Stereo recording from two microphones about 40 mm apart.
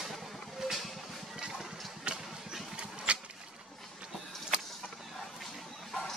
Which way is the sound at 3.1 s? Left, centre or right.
Right.